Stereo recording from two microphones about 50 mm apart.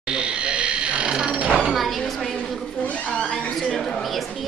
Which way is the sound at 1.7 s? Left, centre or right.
Centre.